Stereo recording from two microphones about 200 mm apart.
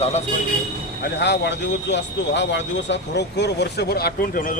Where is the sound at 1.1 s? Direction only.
60° left (ahead or behind).